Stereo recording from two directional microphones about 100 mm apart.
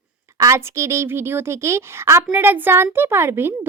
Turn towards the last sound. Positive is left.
turn(degrees=-25)  # may be behind; listen again after turning